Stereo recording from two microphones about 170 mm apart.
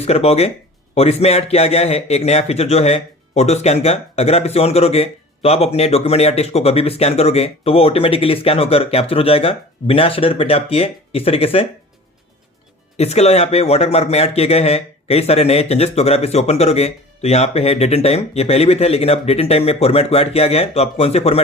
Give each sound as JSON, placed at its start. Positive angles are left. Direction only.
{"t": 0.0, "sound": "speech", "side_deg": 40}
{"t": 13.0, "sound": "speech", "side_deg": 40}